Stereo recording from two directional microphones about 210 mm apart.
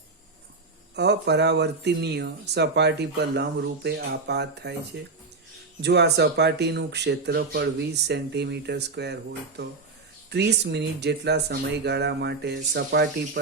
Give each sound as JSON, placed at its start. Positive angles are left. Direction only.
{"t": 0.9, "sound": "speech", "side_deg": -55}
{"t": 5.8, "sound": "speech", "side_deg": -55}
{"t": 10.2, "sound": "speech", "side_deg": -50}